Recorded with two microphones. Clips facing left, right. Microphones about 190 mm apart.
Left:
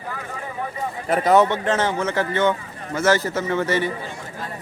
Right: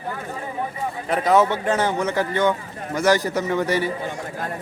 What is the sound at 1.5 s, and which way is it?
A man's voice, 10° right (ahead or behind).